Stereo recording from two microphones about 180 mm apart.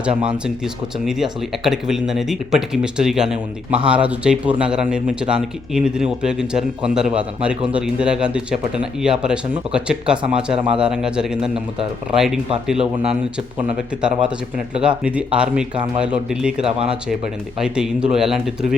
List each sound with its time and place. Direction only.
0.3 s speech: 5° right (ahead or behind)
14.0 s speech: 5° right (ahead or behind)